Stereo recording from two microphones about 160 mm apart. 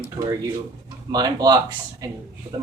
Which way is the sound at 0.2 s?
35° right (ahead or behind).